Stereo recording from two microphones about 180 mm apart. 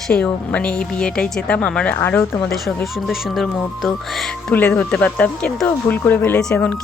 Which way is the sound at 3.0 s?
Centre (ahead or behind).